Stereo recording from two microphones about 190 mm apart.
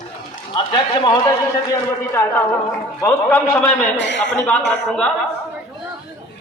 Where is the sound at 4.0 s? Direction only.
70° left (ahead or behind).